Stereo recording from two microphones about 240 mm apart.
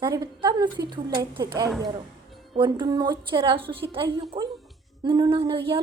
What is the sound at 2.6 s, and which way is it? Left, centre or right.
A woman's voice, centre.